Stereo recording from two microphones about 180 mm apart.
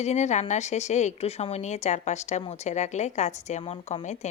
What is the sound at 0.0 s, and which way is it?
Speech, 40° left (ahead or behind).